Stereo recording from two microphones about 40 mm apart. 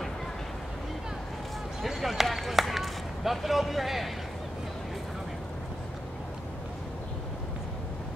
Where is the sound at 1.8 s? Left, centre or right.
Centre.